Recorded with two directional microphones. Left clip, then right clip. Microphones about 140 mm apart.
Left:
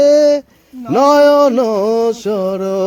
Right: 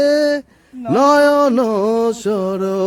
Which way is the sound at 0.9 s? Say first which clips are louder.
Left 3 dB; 20° right (ahead or behind).